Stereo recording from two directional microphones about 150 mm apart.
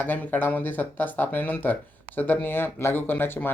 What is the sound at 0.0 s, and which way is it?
Speech, 10° left (ahead or behind).